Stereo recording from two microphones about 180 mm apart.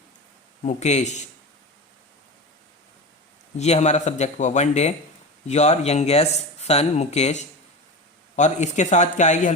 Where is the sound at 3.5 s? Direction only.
40° left (ahead or behind).